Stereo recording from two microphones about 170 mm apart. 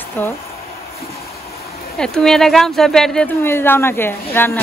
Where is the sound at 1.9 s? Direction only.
5° left (ahead or behind).